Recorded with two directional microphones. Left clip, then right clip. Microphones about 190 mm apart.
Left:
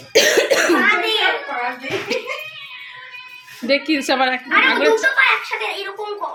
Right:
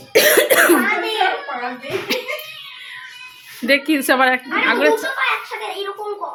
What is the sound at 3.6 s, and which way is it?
A woman's voice, 15° right (ahead or behind).